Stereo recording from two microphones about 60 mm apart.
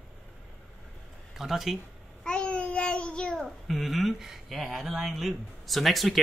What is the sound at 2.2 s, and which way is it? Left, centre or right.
Babbling, centre.